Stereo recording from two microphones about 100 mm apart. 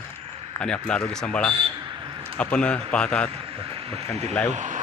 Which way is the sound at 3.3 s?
70° right (ahead or behind).